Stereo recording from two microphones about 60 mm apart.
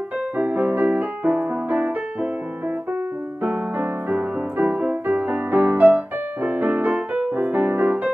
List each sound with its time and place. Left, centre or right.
0.4 s music: right
3.7 s music: right